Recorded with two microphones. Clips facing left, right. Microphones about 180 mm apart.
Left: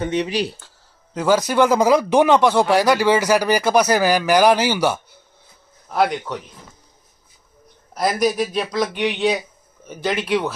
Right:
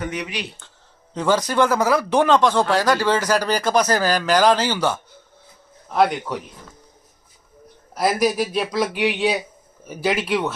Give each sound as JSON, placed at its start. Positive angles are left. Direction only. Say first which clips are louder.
{"t": 0.0, "sound": "speech", "louder": "left 7 dB", "side_deg": 30}
{"t": 1.1, "sound": "speech", "louder": "left 2 dB", "side_deg": 5}
{"t": 5.9, "sound": "speech", "louder": "right 1 dB", "side_deg": 0}
{"t": 7.9, "sound": "speech", "louder": "even", "side_deg": -5}